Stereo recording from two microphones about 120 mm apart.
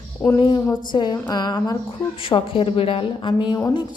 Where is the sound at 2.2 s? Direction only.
45° left (ahead or behind).